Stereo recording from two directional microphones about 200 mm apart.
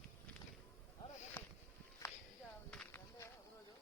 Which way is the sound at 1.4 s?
10° left (ahead or behind).